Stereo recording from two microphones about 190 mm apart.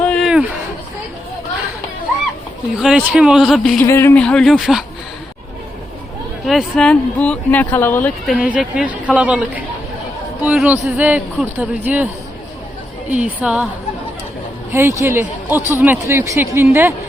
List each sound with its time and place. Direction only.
0.1 s a sound: centre (ahead or behind)
2.7 s speech: 5° right (ahead or behind)
3.8 s speech: 15° left (ahead or behind); by 4.8 s 5° right (ahead or behind)
6.4 s speech: centre (ahead or behind)
8.3 s speech: 5° right (ahead or behind)
10.4 s speech: 5° right (ahead or behind)
13.1 s speech: 5° right (ahead or behind)
14.7 s speech: 15° right (ahead or behind)